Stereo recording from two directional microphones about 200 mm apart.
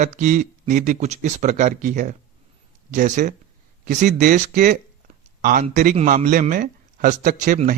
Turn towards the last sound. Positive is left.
turn(degrees=-40)  # may be behind; listen again after turning